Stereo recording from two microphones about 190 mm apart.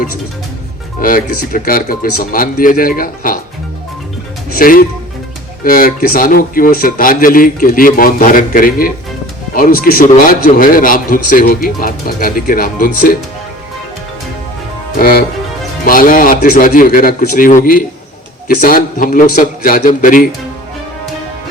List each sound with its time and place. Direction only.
1.0 s a man's voice: 45° left (ahead or behind)
4.5 s a man's voice: 50° left (ahead or behind)
14.9 s a man's voice: 50° left (ahead or behind)